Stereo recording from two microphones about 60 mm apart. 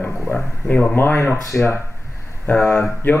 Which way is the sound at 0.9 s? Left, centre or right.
Left.